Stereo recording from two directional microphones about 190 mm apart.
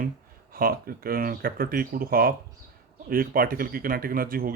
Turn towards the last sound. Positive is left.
turn(degrees=-50)  # may be behind; listen again after turning